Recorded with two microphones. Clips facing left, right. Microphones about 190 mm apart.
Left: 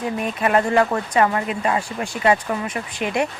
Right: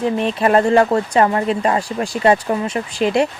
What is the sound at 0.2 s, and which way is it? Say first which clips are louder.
Speech: right 3 dB; 30° right (ahead or behind).